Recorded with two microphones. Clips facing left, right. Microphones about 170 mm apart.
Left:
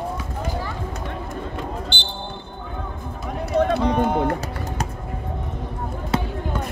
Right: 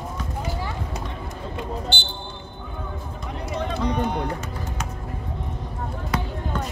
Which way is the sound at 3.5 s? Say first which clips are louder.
Left 7 dB; 60° left (ahead or behind).